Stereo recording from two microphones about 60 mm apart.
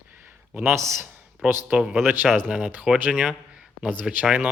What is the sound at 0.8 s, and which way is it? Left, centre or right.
Speech, right.